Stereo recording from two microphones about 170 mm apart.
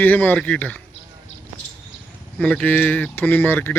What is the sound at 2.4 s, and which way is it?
Speech, 5° left (ahead or behind).